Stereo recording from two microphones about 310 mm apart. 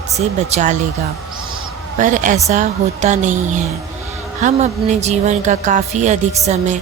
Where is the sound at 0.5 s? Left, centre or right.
Right.